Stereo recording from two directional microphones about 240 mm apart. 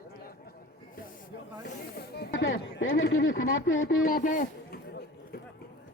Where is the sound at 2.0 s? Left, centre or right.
Left.